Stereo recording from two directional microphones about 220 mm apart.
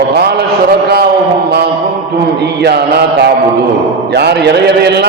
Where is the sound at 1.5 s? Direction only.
45° right (ahead or behind).